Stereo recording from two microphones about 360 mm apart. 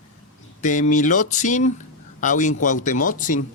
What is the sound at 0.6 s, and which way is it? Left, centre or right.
A man's voice, left.